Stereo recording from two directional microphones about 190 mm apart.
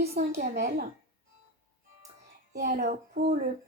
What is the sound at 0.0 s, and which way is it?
Speech, 55° right (ahead or behind).